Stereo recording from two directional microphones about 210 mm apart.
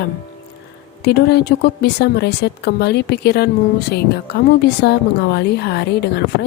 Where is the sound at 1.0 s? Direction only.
50° left (ahead or behind).